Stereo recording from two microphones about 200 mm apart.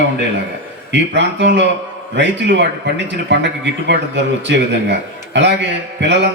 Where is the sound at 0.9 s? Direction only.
60° right (ahead or behind).